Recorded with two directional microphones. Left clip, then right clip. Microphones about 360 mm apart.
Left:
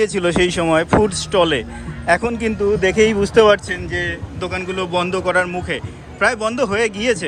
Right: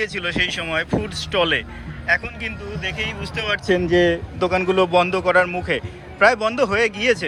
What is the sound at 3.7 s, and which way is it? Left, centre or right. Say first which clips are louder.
A man's voice: right 6 dB; centre.